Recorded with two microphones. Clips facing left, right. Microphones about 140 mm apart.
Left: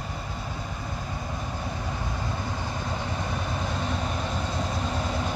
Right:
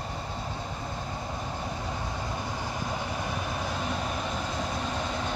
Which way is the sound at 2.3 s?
15° right (ahead or behind).